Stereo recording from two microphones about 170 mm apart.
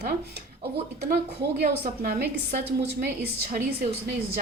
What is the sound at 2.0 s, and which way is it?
Speech, 60° right (ahead or behind).